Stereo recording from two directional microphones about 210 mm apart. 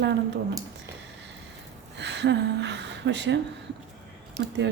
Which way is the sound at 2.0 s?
55° right (ahead or behind).